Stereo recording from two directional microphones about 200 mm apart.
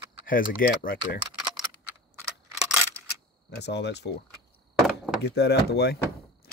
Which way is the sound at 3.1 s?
55° left (ahead or behind).